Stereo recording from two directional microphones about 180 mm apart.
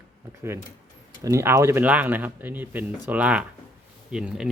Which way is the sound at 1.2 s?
15° right (ahead or behind).